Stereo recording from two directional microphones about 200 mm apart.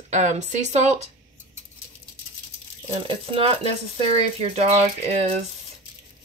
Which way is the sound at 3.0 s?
30° right (ahead or behind).